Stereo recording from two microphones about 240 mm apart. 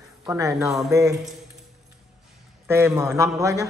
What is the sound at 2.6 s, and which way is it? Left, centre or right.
A man's voice, centre.